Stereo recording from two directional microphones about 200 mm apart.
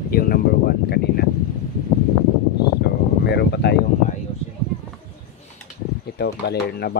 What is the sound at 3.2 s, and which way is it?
Speech, 55° left (ahead or behind).